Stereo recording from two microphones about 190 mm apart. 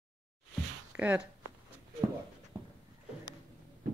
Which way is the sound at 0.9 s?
5° right (ahead or behind).